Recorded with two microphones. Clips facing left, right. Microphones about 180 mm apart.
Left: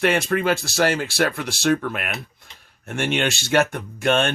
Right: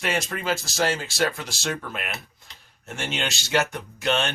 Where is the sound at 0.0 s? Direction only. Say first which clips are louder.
Left 8 dB; 60° left (ahead or behind).